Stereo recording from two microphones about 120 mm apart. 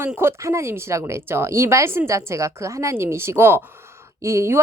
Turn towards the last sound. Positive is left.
turn(degrees=-25)  # may be behind; listen again after turning